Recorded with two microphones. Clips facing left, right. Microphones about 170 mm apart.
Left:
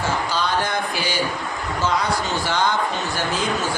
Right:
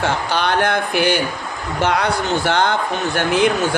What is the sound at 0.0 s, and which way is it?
Speech, 65° right (ahead or behind).